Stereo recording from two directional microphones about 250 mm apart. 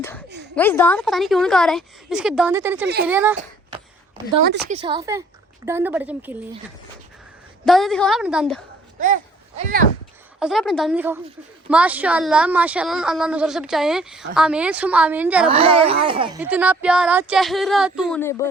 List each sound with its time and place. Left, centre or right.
0.5 s a woman's voice: centre
2.8 s speech: right
3.1 s a woman's voice: centre
4.7 s a woman's voice: centre
7.6 s a woman's voice: centre
9.0 s a sound: right
10.4 s a woman's voice: centre
15.4 s a child's voice: right
16.4 s a woman's voice: centre
18.2 s speech: centre